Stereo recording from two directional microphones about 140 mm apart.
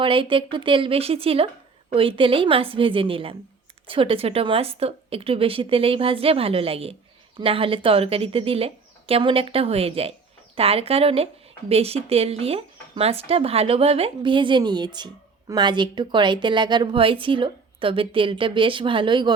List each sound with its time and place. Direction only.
0.0 s a woman's voice: 40° right (ahead or behind)